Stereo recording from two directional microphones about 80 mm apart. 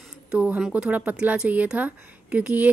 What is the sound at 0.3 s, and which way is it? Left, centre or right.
Speech, centre.